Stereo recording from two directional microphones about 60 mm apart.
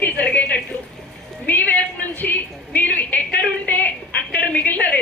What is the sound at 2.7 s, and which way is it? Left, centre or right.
A woman's voice, left.